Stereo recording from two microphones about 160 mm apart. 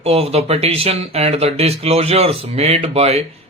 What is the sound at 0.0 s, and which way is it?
Speech, 40° right (ahead or behind).